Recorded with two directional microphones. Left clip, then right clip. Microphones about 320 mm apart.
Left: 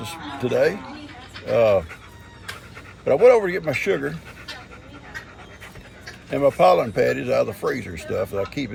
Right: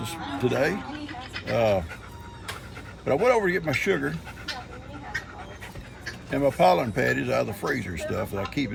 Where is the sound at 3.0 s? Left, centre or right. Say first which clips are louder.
Left 7 dB; centre.